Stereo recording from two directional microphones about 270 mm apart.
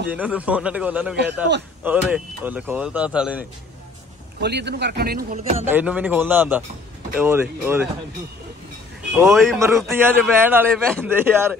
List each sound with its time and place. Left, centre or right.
0.1 s speech: centre
4.4 s speech: right
5.6 s a man's voice: centre
9.1 s a man's voice: centre
11.1 s a man's voice: centre